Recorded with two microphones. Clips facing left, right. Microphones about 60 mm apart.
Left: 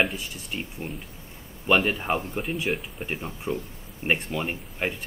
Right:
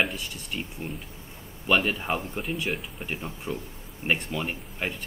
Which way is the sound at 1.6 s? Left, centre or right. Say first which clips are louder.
Left 2 dB; left.